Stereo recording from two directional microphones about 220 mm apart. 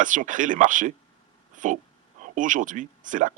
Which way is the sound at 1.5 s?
35° right (ahead or behind).